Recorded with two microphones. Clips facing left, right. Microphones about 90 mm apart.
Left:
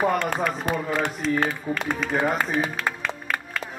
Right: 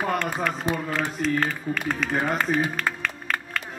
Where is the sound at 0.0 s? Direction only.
5° left (ahead or behind).